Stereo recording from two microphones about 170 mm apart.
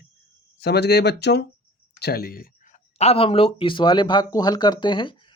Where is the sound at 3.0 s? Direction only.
35° left (ahead or behind).